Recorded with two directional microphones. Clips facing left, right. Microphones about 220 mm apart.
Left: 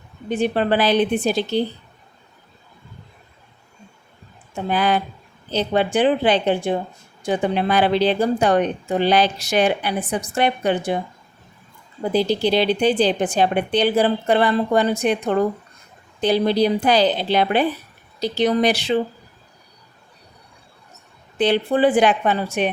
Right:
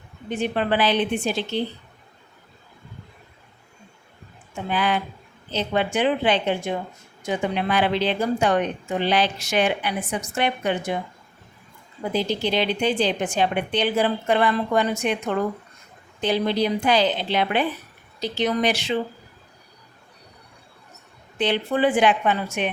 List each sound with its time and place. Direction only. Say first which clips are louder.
0.3 s a woman's voice: left 4 dB; 35° left (ahead or behind)
4.5 s a woman's voice: left 4 dB; 40° left (ahead or behind)
12.1 s a woman's voice: left 5 dB; 35° left (ahead or behind)
21.3 s a woman's voice: left 4 dB; 35° left (ahead or behind)